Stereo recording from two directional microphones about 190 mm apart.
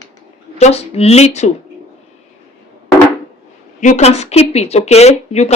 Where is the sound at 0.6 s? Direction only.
35° left (ahead or behind).